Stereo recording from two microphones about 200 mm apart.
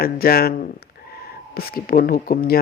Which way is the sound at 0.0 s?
50° left (ahead or behind).